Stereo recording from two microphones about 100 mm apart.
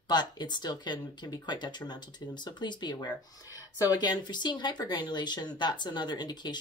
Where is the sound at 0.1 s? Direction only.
45° left (ahead or behind).